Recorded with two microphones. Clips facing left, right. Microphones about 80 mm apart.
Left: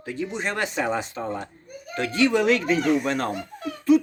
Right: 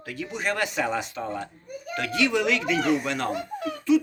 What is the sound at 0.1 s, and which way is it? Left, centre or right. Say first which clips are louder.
A man's voice: left 1 dB; left.